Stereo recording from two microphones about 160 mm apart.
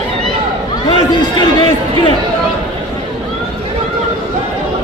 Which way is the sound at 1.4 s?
35° left (ahead or behind).